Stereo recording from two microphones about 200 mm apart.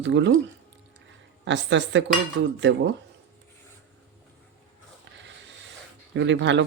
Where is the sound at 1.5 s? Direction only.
65° right (ahead or behind).